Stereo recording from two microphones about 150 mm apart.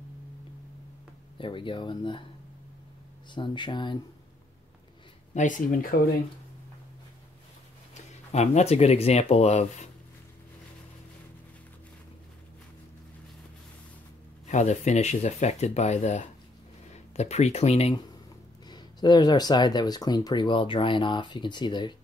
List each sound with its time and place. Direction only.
1.4 s speech: 35° left (ahead or behind)
3.3 s speech: 30° left (ahead or behind)
5.3 s speech: 60° left (ahead or behind)
7.9 s speech: 45° left (ahead or behind)
14.4 s speech: 50° left (ahead or behind)
18.7 s speech: 30° left (ahead or behind)